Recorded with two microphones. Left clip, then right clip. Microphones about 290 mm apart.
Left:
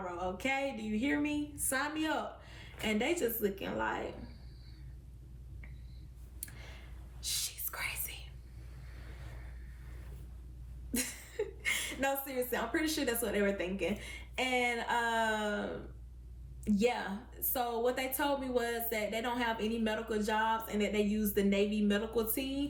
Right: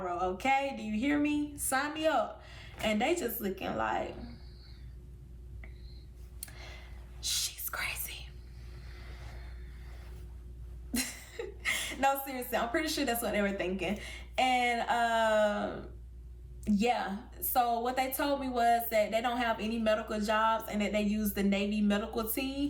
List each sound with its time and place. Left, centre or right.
0.0 s a woman's voice: centre
6.4 s a sound: centre
7.3 s whispering: centre
10.9 s a woman's voice: centre